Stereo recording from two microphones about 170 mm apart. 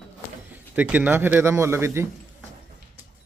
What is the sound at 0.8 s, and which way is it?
Speech, 10° right (ahead or behind).